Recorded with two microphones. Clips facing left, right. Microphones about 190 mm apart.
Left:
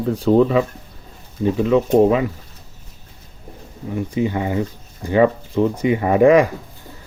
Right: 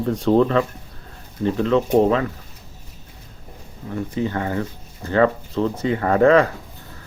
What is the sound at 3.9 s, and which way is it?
Speech, 15° left (ahead or behind).